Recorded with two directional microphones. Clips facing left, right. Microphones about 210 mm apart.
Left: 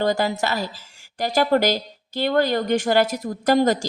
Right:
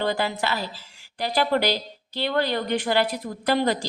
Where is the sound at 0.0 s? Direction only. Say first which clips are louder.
Left 4 dB; 45° left (ahead or behind).